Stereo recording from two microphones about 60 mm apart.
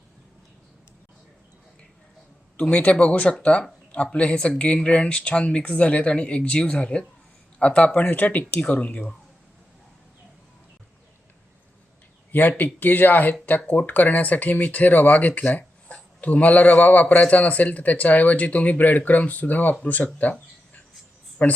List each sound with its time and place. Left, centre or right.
2.6 s speech: centre
12.3 s speech: left
21.4 s speech: left